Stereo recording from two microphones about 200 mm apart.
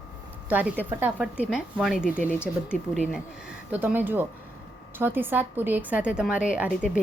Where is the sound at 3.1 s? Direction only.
5° right (ahead or behind).